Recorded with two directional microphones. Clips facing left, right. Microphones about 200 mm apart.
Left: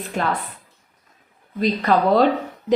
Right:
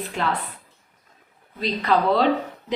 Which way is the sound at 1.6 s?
45° left (ahead or behind).